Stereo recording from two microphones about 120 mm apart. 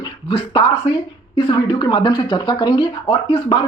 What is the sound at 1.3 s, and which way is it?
Speech, 40° left (ahead or behind).